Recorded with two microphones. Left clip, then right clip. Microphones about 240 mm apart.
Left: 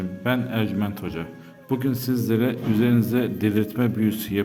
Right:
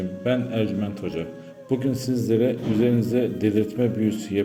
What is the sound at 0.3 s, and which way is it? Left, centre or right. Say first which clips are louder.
A man's voice: right 1 dB; left.